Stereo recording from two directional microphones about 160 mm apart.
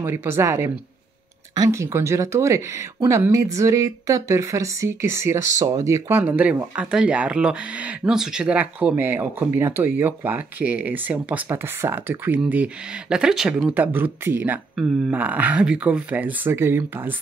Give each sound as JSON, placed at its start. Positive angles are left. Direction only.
{"t": 0.0, "sound": "speech", "side_deg": -15}